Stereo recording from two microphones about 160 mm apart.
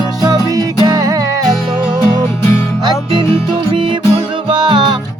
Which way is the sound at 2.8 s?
30° right (ahead or behind).